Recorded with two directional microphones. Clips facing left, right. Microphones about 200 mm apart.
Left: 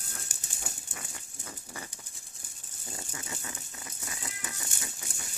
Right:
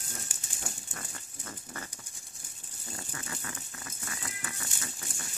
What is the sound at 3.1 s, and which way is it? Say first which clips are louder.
Rattle: right 1 dB; 20° left (ahead or behind).